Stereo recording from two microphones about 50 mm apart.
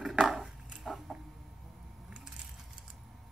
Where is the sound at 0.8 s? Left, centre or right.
Centre.